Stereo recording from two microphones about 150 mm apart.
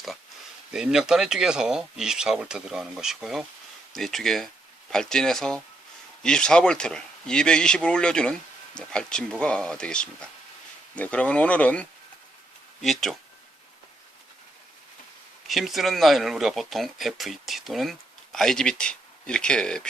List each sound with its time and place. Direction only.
0.7 s speech: 5° right (ahead or behind)
15.4 s speech: centre (ahead or behind)